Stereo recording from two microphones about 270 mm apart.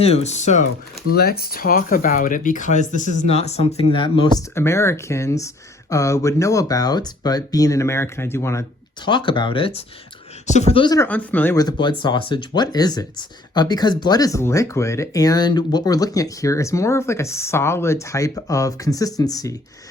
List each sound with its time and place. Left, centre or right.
0.0 s speech: left